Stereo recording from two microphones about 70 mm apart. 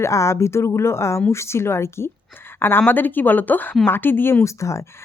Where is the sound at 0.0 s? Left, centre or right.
Left.